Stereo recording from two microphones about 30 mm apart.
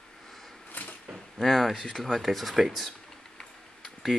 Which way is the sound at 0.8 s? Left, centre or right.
Left.